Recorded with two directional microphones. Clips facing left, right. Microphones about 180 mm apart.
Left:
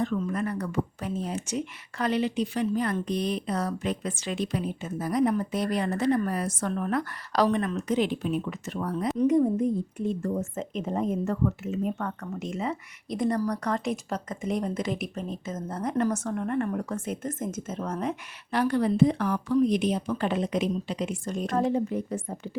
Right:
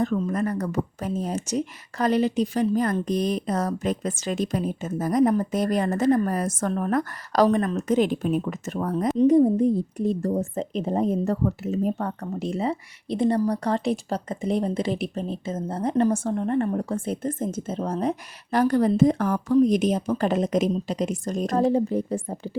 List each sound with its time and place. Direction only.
0.0 s speech: 40° right (ahead or behind)
9.2 s a woman's voice: 35° right (ahead or behind)